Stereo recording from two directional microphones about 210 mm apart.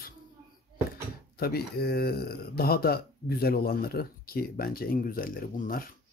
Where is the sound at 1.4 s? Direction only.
50° left (ahead or behind).